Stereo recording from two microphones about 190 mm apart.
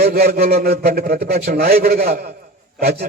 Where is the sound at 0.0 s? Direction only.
55° right (ahead or behind).